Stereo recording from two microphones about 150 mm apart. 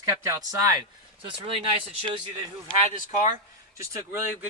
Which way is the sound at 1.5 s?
35° right (ahead or behind).